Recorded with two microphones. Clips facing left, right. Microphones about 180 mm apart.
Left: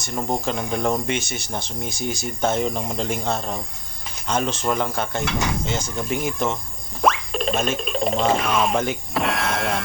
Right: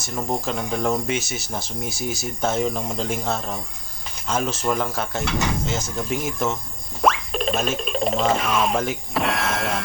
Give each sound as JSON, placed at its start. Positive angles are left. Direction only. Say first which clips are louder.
{"t": 0.2, "sound": "speech", "louder": "left 1 dB", "side_deg": 0}